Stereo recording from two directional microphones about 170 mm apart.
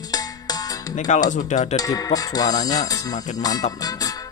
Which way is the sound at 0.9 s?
45° left (ahead or behind).